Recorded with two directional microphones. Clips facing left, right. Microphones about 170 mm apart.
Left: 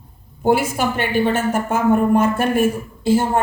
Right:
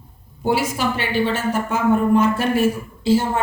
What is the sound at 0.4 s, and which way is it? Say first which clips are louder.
A woman's voice: left 3 dB; 50° left (ahead or behind).